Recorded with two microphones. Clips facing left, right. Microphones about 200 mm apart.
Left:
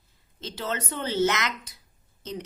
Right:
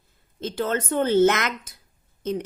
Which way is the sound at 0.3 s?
50° right (ahead or behind).